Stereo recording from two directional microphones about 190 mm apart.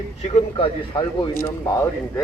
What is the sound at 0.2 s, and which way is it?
A man's voice, 35° left (ahead or behind).